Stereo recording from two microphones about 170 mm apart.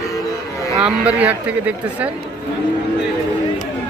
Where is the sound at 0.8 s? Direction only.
10° right (ahead or behind).